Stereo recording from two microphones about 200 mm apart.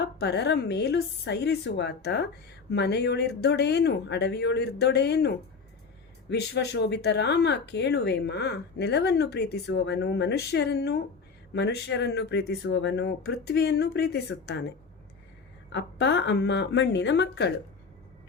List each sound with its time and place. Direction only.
0.0 s speech: 55° left (ahead or behind)
6.3 s speech: 55° left (ahead or behind)
15.7 s speech: 60° left (ahead or behind)